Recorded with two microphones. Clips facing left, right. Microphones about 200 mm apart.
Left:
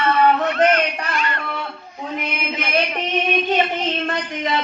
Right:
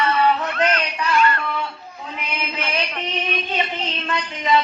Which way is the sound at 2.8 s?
55° left (ahead or behind).